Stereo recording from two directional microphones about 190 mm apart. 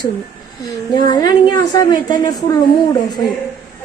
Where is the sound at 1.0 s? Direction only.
20° left (ahead or behind).